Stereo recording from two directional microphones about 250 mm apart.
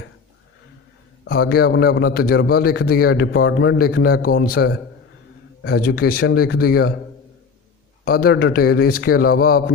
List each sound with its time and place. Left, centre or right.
1.3 s a man's voice: left
8.0 s a man's voice: left